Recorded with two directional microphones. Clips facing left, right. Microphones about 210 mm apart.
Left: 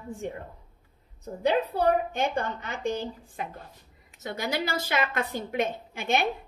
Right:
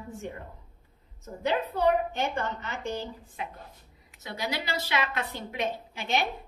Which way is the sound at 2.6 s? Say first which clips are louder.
Left 4 dB; 15° left (ahead or behind).